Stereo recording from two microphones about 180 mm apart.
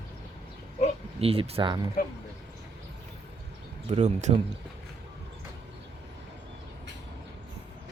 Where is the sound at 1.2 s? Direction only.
35° right (ahead or behind).